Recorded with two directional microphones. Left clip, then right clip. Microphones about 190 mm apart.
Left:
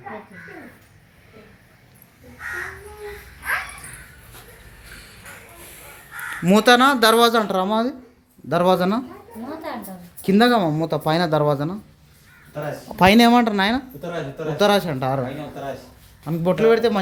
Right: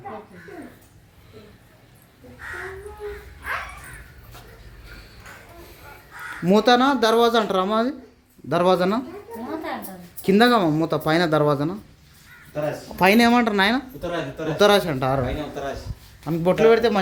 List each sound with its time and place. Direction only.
6.4 s speech: centre (ahead or behind)
10.2 s speech: centre (ahead or behind)
13.0 s speech: 10° left (ahead or behind)
16.2 s speech: 5° right (ahead or behind)